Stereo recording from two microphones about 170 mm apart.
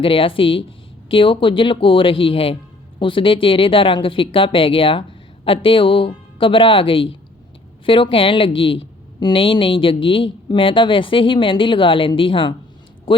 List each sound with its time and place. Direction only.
0.0 s speech: 30° left (ahead or behind)